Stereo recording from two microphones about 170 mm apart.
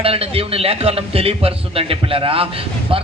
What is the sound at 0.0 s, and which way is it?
A man's voice, 35° right (ahead or behind).